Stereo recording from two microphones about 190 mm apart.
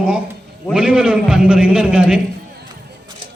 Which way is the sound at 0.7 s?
5° right (ahead or behind).